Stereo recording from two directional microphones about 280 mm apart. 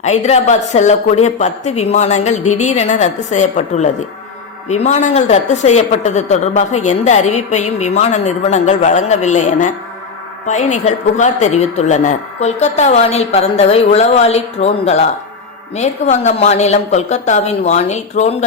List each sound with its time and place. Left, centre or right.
0.0 s a woman's voice: left